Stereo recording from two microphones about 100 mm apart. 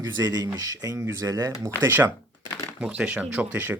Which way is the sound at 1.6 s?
20° right (ahead or behind).